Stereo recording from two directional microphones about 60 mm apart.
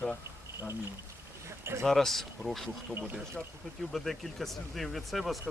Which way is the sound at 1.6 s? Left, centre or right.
Right.